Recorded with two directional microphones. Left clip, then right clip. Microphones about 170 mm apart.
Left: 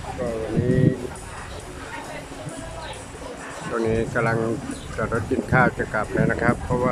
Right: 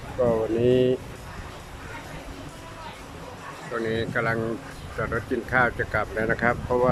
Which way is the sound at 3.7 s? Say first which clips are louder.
Left 3 dB; 10° left (ahead or behind).